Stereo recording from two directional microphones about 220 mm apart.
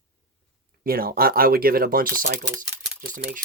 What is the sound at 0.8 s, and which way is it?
Speech, 40° right (ahead or behind).